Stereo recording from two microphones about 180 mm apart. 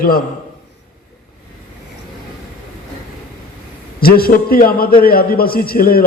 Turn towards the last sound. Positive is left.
turn(degrees=55)  # may be behind; listen again after turning